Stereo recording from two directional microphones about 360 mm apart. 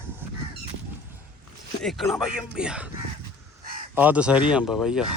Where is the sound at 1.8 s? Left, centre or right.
Centre.